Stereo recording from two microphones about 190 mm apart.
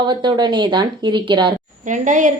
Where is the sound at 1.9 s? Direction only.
40° right (ahead or behind).